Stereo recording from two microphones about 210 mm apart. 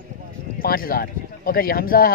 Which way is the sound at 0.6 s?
45° left (ahead or behind).